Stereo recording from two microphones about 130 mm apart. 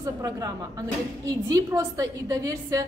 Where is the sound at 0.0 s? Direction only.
30° right (ahead or behind).